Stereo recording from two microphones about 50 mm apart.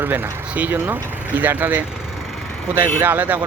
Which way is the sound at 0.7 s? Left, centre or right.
Right.